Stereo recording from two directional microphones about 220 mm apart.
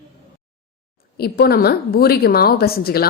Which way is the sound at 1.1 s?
45° left (ahead or behind).